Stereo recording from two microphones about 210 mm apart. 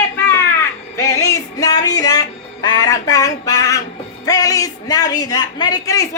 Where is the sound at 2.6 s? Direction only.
20° left (ahead or behind).